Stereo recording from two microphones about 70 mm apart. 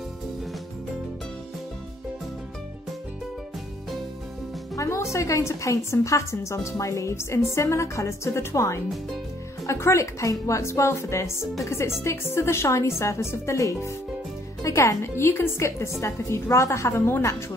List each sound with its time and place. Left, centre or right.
4.7 s a woman's voice: left